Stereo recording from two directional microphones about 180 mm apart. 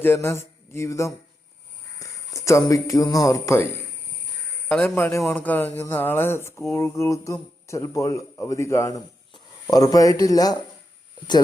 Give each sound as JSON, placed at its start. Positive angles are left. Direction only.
{"t": 0.0, "sound": "a sound", "side_deg": 15}
{"t": 2.0, "sound": "speech", "side_deg": 15}
{"t": 4.7, "sound": "speech", "side_deg": 10}